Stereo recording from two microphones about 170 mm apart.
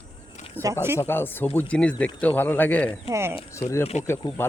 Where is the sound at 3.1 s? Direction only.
15° right (ahead or behind).